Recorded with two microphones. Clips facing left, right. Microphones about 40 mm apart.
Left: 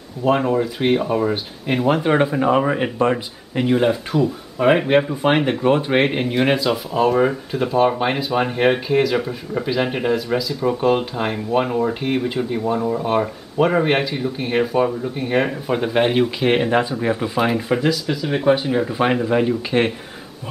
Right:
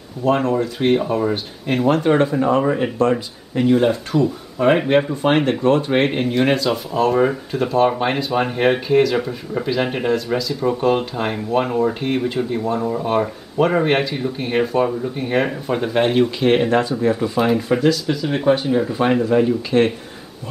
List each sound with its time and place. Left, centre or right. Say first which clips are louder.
0.2 s speech: even; centre